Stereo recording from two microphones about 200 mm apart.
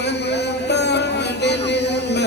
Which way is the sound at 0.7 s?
60° left (ahead or behind).